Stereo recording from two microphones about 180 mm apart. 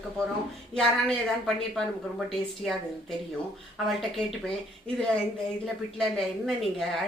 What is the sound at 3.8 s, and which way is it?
Speech, centre (ahead or behind).